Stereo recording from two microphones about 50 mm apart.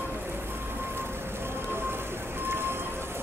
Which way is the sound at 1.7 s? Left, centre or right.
Right.